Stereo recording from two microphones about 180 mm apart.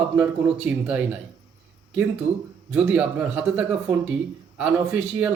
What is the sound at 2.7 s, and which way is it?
Speech, 5° right (ahead or behind).